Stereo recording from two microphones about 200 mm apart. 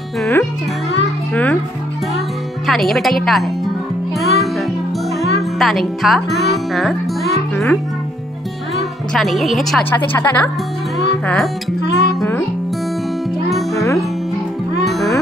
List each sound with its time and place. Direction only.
0.2 s speech: 10° left (ahead or behind)
1.3 s music: 5° left (ahead or behind)
2.6 s speech: centre (ahead or behind)
4.2 s music: centre (ahead or behind)
5.6 s speech: centre (ahead or behind)
11.8 s music: 60° left (ahead or behind)
13.5 s music: centre (ahead or behind)